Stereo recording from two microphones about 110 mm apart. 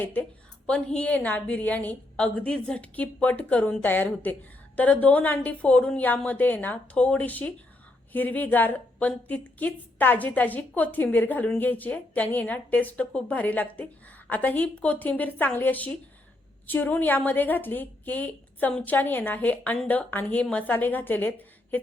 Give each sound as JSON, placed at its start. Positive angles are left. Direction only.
{"t": 0.0, "sound": "a woman's voice", "side_deg": 15}